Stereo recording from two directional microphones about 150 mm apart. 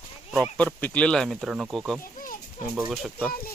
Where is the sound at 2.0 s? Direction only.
65° left (ahead or behind).